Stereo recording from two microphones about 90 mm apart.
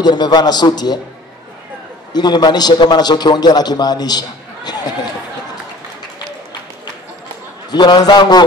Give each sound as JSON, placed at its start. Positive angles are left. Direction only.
{"t": 0.0, "sound": "a man's voice", "side_deg": 50}
{"t": 2.1, "sound": "a man's voice", "side_deg": 50}
{"t": 7.7, "sound": "a man's voice", "side_deg": 50}